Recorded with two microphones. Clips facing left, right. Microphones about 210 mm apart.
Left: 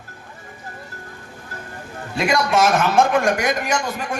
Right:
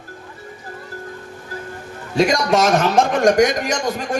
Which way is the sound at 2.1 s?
40° right (ahead or behind).